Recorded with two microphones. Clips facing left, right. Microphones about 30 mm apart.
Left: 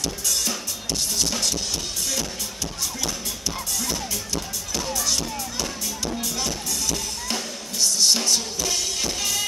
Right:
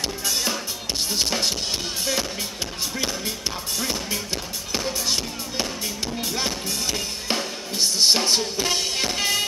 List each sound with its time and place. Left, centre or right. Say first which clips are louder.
0.3 s drum: right 2 dB; right
1.1 s music: right 2 dB; right
3.7 s music: right 3 dB; right
6.2 s drum: right 2 dB; right